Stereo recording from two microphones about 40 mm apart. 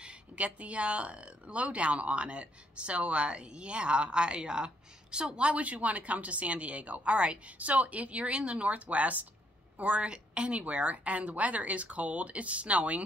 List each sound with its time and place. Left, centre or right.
0.4 s a woman's voice: right